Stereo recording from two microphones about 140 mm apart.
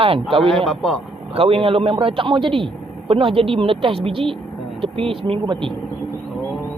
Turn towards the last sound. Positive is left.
turn(degrees=-35)  # may be behind; listen again after turning